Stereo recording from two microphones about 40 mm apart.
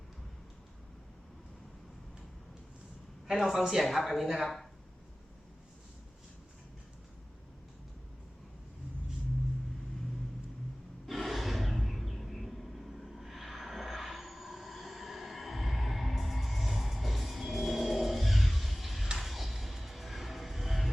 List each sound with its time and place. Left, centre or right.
3.2 s a woman's voice: centre
11.0 s a sound: centre
13.1 s aircraft: centre
19.2 s music: centre